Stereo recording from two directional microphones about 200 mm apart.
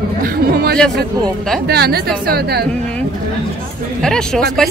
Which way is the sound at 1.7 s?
50° right (ahead or behind).